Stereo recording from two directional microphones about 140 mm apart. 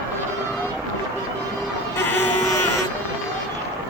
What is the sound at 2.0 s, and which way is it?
Sheep, 15° left (ahead or behind).